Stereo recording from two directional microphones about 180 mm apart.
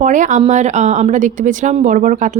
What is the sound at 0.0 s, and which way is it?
A woman's voice, 45° right (ahead or behind).